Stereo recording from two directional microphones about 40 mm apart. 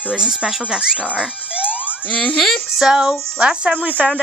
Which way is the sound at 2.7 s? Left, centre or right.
Centre.